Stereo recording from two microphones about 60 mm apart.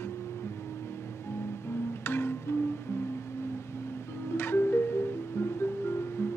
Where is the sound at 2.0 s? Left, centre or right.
Left.